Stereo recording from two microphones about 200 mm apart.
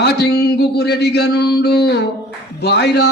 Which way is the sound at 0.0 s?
55° left (ahead or behind).